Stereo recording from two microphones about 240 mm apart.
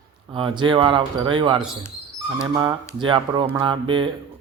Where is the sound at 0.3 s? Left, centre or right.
Centre.